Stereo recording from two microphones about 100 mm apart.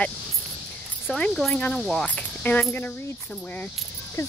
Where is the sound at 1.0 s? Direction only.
Centre (ahead or behind).